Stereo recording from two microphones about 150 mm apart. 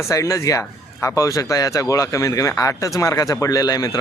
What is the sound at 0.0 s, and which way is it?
Speech, 20° left (ahead or behind).